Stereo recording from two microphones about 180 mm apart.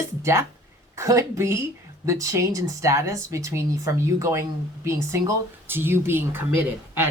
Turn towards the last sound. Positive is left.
turn(degrees=-15)  # may be behind; listen again after turning